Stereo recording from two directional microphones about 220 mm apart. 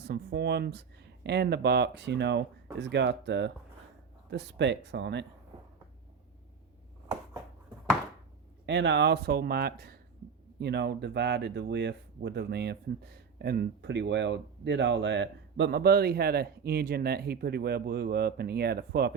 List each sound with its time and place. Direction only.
0.0 s speech: 50° right (ahead or behind)
8.6 s speech: 50° right (ahead or behind)